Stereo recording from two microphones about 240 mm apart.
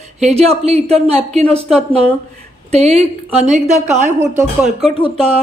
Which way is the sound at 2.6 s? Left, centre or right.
Right.